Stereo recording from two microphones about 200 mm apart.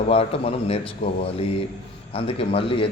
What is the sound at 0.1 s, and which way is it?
Speech, 30° left (ahead or behind).